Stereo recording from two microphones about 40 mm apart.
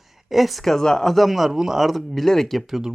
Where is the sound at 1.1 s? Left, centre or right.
Centre.